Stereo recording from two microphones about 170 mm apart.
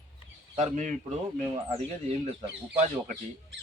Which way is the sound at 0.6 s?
45° right (ahead or behind).